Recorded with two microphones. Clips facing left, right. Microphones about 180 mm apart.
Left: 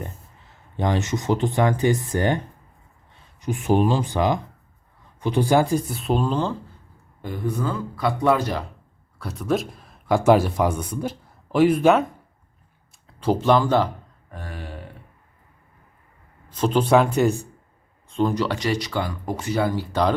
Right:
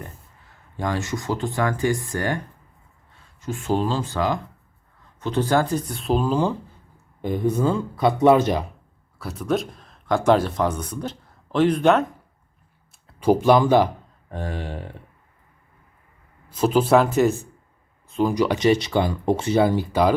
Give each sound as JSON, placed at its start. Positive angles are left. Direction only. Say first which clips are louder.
{"t": 0.8, "sound": "speech", "louder": "left 2 dB", "side_deg": 20}
{"t": 3.4, "sound": "speech", "louder": "left 3 dB", "side_deg": 15}
{"t": 9.1, "sound": "speech", "louder": "even", "side_deg": 0}
{"t": 13.1, "sound": "speech", "louder": "right 3 dB", "side_deg": -10}
{"t": 16.5, "sound": "speech", "louder": "right 1 dB", "side_deg": -5}
{"t": 19.9, "sound": "speech", "louder": "right 2 dB", "side_deg": -10}